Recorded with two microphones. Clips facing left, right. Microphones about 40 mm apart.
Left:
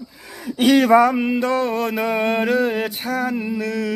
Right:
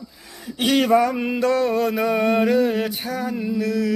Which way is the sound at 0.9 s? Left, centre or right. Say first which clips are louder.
Left 3 dB; left.